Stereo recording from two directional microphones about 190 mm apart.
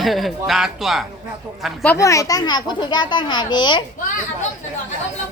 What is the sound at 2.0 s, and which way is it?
A child's voice, 15° left (ahead or behind).